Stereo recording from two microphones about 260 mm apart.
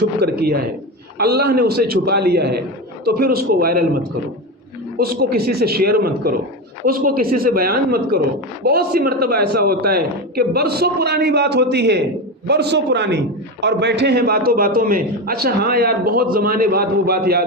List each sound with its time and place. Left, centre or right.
0.0 s a man's voice: right
4.9 s a man's voice: right